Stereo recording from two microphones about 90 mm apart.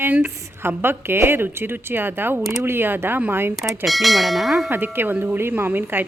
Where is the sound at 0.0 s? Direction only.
25° right (ahead or behind).